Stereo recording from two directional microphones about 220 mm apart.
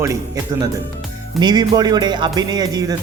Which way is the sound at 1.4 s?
20° right (ahead or behind).